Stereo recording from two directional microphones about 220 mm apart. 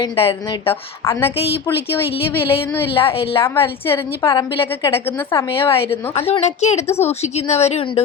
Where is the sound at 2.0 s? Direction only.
25° left (ahead or behind).